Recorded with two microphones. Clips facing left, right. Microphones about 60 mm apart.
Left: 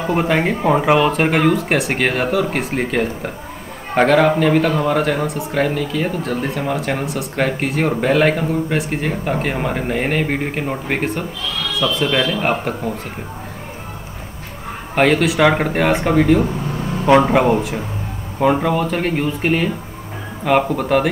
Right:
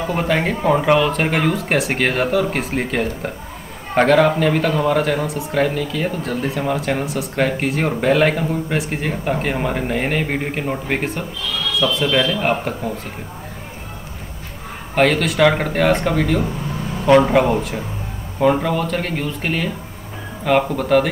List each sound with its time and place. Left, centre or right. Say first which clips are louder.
0.0 s a man's voice: left 2 dB; centre
15.0 s speech: left 1 dB; centre